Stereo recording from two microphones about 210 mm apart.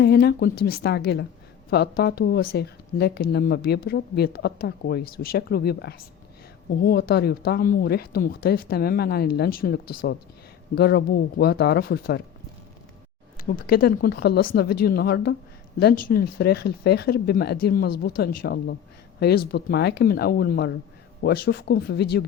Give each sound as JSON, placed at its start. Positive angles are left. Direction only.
{"t": 0.0, "sound": "speech", "side_deg": 50}
{"t": 13.3, "sound": "speech", "side_deg": 40}